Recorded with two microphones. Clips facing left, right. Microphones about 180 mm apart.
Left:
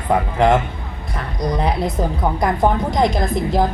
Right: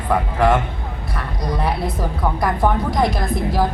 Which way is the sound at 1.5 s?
20° left (ahead or behind).